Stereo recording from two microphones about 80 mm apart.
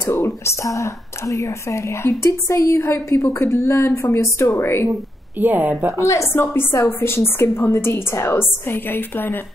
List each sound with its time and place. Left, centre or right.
0.0 s speech: left
5.4 s speech: right
6.0 s a woman's voice: left